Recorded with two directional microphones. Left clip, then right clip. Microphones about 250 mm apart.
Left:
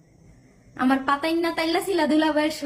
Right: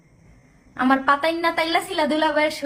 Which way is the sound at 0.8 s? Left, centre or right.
Centre.